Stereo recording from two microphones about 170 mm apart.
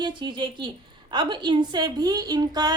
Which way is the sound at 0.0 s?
25° right (ahead or behind).